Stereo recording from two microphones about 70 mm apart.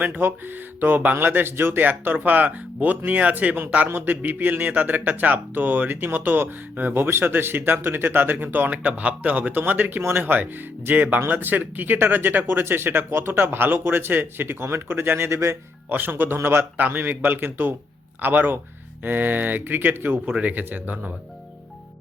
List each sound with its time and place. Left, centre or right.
0.0 s speech: right
15.9 s speech: right